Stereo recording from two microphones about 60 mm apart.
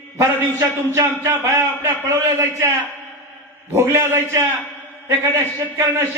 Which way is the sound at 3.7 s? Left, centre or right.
Right.